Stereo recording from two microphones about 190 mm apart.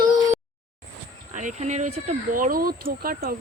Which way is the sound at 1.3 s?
40° right (ahead or behind).